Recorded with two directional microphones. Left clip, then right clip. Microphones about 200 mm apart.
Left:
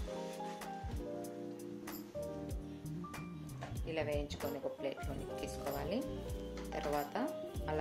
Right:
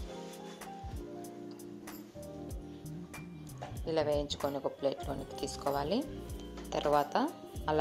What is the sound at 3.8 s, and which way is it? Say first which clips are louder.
Music: right 7 dB; 30° right (ahead or behind).